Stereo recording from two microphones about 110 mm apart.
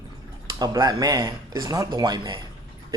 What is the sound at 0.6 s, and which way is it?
Speech, 40° right (ahead or behind).